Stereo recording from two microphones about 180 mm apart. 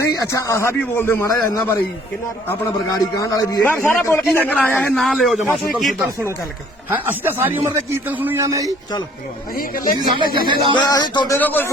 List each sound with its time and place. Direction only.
0.1 s a man's voice: 15° left (ahead or behind)
3.7 s a man's voice: 10° left (ahead or behind)
5.4 s a man's voice: 10° right (ahead or behind)
5.8 s a man's voice: centre (ahead or behind)
6.9 s a man's voice: 10° right (ahead or behind)
9.6 s speech: 50° left (ahead or behind)
10.5 s a man's voice: 25° right (ahead or behind)
10.8 s a man's voice: 25° left (ahead or behind)
11.3 s a man's voice: 10° left (ahead or behind)